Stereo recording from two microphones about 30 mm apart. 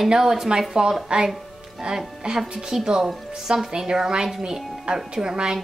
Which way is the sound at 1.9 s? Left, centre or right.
Right.